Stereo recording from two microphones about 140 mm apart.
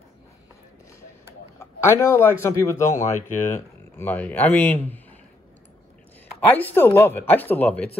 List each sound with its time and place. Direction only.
1.6 s speech: 15° left (ahead or behind)
6.4 s speech: 10° left (ahead or behind)